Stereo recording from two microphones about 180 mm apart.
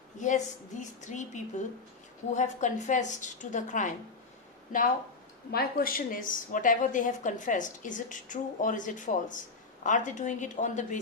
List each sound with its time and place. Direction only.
0.2 s a woman's voice: 45° left (ahead or behind)
5.5 s a woman's voice: 55° left (ahead or behind)